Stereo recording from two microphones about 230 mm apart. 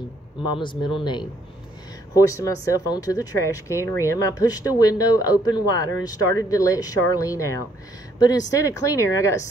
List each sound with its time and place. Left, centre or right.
0.6 s speech: left